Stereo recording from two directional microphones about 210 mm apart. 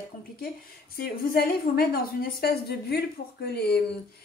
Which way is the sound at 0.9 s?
45° left (ahead or behind).